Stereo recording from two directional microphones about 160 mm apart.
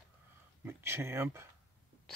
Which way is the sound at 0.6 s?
15° right (ahead or behind).